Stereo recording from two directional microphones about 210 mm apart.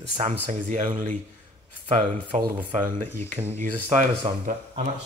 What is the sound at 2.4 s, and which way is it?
Speech, 40° right (ahead or behind).